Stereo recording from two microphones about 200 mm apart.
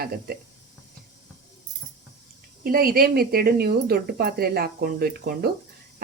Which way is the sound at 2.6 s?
50° right (ahead or behind).